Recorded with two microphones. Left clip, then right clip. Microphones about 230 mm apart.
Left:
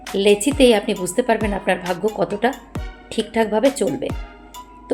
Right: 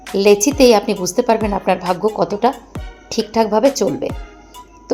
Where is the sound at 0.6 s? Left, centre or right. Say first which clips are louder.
Right 3 dB; centre.